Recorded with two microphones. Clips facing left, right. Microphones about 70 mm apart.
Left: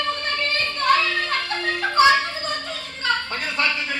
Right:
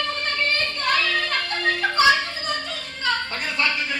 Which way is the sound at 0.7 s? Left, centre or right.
Left.